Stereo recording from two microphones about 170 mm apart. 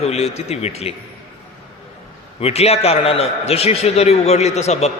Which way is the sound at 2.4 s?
35° left (ahead or behind).